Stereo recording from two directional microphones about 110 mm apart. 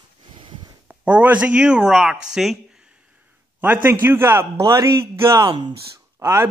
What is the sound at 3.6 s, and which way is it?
Speech, 15° right (ahead or behind).